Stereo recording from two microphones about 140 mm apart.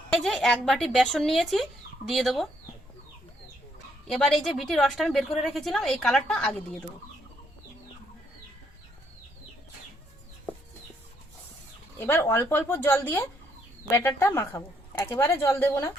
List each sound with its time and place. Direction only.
0.1 s a woman's voice: 5° left (ahead or behind)
4.0 s a woman's voice: centre (ahead or behind)
11.9 s a woman's voice: 15° left (ahead or behind)